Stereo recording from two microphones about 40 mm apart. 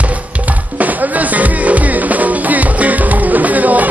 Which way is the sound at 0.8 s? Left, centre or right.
Right.